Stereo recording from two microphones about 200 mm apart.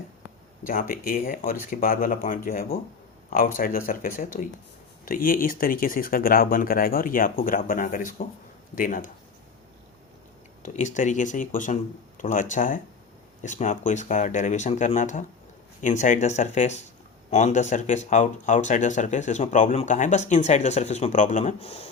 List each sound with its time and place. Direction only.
0.7 s speech: 45° left (ahead or behind)
10.9 s speech: 40° left (ahead or behind)